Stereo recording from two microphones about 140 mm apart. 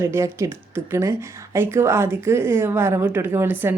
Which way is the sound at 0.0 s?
20° right (ahead or behind).